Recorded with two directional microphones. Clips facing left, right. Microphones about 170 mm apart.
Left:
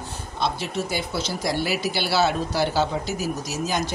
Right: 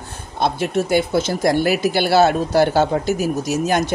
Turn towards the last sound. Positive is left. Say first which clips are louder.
# right 7 dB
turn(degrees=-60)  # may be behind; listen again after turning